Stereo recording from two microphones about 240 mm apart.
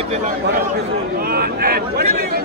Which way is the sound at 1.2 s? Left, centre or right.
Right.